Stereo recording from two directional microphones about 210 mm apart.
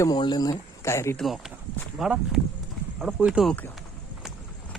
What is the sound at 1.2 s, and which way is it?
Speech, centre (ahead or behind).